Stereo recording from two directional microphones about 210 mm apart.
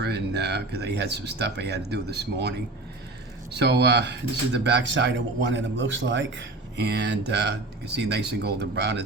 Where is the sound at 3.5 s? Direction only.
50° right (ahead or behind).